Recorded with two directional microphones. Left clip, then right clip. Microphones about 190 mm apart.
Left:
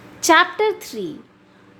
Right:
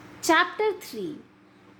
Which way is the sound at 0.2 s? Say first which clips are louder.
Left 7 dB; 15° left (ahead or behind).